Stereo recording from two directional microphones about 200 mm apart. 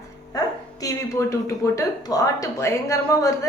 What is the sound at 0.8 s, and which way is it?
A woman's voice, 15° left (ahead or behind).